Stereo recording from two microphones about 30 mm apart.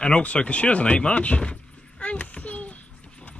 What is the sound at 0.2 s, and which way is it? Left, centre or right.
Speech, left.